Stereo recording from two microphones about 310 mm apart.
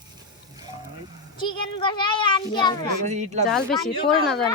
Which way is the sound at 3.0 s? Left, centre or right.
Right.